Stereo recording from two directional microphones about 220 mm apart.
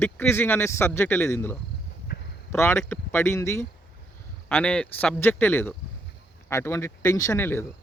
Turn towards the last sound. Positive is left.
turn(degrees=10)  # may be behind; listen again after turning